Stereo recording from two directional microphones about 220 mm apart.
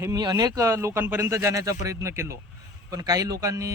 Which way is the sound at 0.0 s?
15° right (ahead or behind).